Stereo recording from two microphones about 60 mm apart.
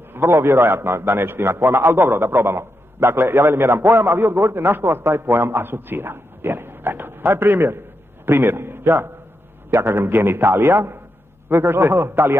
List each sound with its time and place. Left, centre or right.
0.1 s a man's voice: right